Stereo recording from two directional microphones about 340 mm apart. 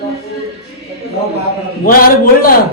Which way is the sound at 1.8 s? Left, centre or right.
Left.